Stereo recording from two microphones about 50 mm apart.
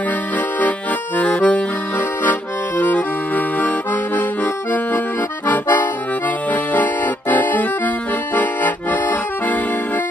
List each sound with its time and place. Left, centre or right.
0.6 s accordion: left
2.8 s accordion: left
5.5 s accordion: left
6.5 s music: left
8.4 s accordion: left